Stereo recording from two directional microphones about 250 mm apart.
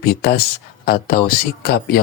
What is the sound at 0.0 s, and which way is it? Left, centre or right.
Speech, left.